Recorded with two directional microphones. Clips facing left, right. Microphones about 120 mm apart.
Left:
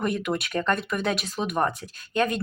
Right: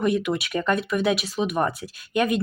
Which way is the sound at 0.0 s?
Centre (ahead or behind).